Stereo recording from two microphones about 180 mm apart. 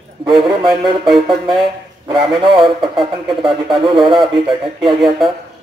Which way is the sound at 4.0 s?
25° right (ahead or behind).